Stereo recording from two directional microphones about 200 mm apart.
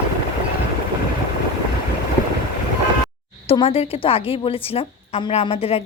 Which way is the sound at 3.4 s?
30° left (ahead or behind).